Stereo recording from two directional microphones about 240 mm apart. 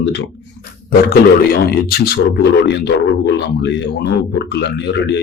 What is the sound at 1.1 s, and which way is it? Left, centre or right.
A man's voice, left.